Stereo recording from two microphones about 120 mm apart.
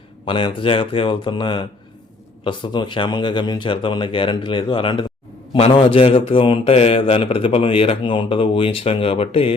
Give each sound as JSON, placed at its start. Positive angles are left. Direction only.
{"t": 0.3, "sound": "a man's voice", "side_deg": 45}